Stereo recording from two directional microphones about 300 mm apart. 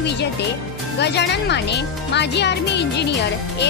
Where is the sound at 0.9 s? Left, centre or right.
Left.